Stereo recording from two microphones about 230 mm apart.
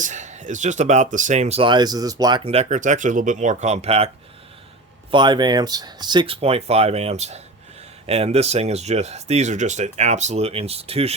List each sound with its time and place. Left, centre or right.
0.0 s speech: right
5.1 s speech: centre